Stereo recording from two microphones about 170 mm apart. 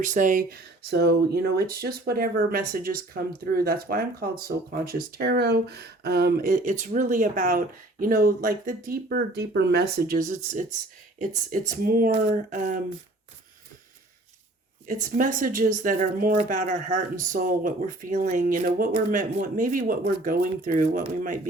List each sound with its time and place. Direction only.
0.0 s speech: 50° right (ahead or behind)
15.2 s speech: 50° right (ahead or behind)